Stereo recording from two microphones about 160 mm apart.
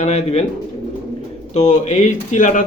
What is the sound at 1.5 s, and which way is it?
A man's voice, 45° left (ahead or behind).